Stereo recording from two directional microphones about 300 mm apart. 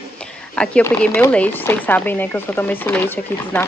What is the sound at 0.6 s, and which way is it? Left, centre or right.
Speech, centre.